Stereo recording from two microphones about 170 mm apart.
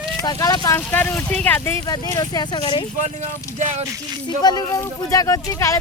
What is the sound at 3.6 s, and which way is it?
Speech, 45° right (ahead or behind).